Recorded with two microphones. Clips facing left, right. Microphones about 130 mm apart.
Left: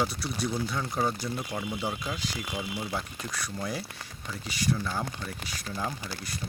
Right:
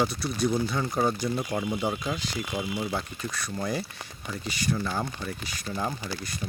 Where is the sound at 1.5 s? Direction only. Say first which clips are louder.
Right 4 dB; 20° right (ahead or behind).